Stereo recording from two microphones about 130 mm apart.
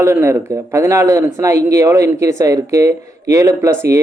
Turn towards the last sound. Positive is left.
turn(degrees=-25)  # may be behind; listen again after turning